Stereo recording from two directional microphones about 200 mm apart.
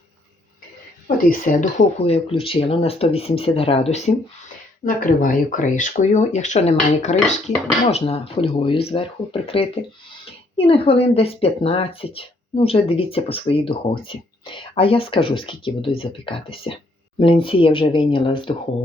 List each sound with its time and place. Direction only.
1.0 s speech: 45° left (ahead or behind)
4.9 s speech: 45° left (ahead or behind); by 18.5 s 25° left (ahead or behind)